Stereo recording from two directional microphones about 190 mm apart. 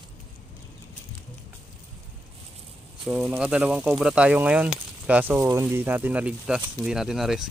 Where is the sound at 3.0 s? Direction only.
5° right (ahead or behind).